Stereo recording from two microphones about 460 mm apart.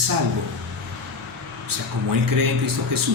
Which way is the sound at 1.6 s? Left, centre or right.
Right.